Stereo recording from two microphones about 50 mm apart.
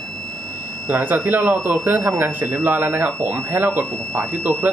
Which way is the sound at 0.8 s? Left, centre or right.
Right.